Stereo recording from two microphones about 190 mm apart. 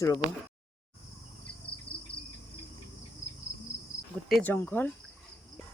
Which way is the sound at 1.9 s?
5° left (ahead or behind).